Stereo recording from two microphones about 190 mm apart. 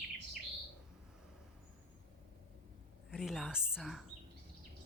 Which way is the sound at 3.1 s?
Centre (ahead or behind).